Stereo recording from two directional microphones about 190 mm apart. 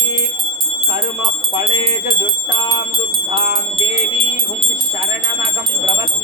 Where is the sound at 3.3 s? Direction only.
25° right (ahead or behind).